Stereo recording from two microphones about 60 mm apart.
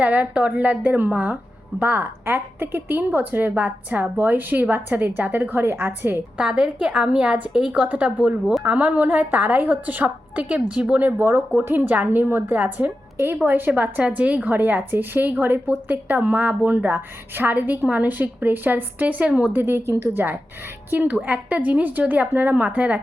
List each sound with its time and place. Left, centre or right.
0.0 s a woman's voice: right
6.4 s a woman's voice: centre
11.2 s a woman's voice: right